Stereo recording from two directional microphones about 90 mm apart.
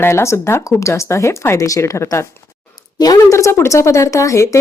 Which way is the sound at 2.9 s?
45° left (ahead or behind).